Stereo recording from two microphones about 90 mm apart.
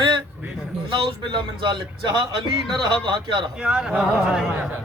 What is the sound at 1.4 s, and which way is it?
Speech, 60° right (ahead or behind).